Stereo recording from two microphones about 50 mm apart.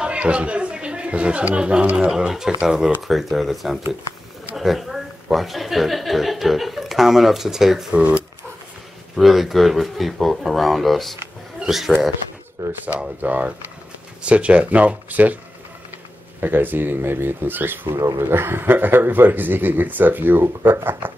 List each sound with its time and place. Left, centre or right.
0.0 s speech: right
2.0 s a woman's voice: centre
7.9 s speech: right
9.1 s speech: centre
12.6 s a sound: right
13.2 s speech: right
16.3 s speech: right